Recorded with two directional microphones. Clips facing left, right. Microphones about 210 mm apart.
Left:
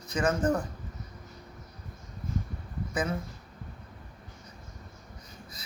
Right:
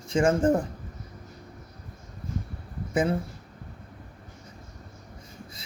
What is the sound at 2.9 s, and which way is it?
Speech, 25° right (ahead or behind).